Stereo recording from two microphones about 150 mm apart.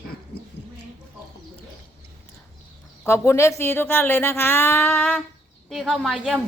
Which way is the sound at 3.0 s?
20° left (ahead or behind).